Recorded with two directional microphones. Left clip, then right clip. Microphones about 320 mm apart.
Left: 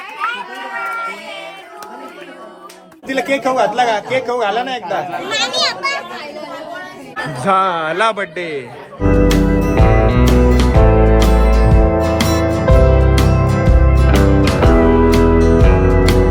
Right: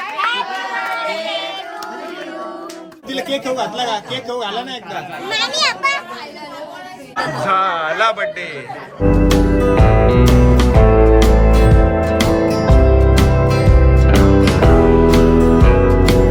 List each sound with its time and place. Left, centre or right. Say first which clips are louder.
3.1 s speech: left 5 dB; centre
7.4 s a man's voice: left 3 dB; centre
9.1 s music: left 2 dB; centre